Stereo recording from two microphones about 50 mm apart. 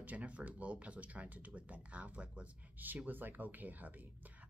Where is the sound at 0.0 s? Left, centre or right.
Right.